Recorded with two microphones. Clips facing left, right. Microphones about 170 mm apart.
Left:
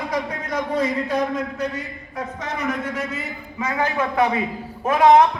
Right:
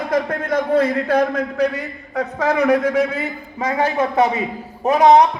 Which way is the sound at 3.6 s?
25° right (ahead or behind).